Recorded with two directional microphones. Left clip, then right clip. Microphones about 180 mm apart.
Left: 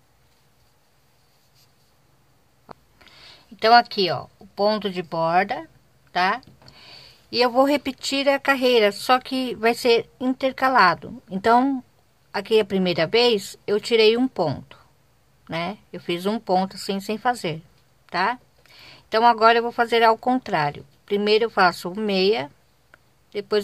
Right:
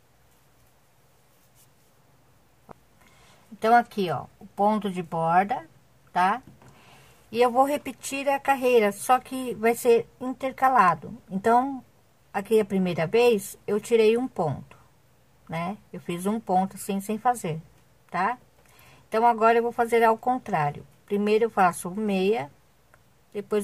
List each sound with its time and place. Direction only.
2.6 s rub: 25° left (ahead or behind)
3.6 s speech: 20° left (ahead or behind)